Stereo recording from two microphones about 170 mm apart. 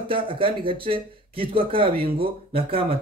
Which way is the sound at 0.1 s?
30° right (ahead or behind).